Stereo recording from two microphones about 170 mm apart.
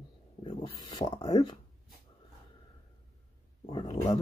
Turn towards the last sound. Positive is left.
turn(degrees=40)  # may be behind; listen again after turning